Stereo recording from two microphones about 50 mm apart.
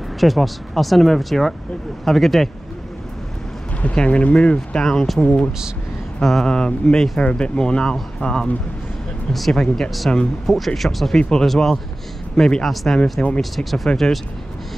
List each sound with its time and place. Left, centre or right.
0.2 s speech: centre
3.8 s speech: left
6.2 s speech: centre
11.1 s speech: centre
11.4 s speech: centre